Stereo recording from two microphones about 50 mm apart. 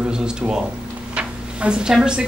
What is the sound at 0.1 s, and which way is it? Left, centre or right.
Speech, centre.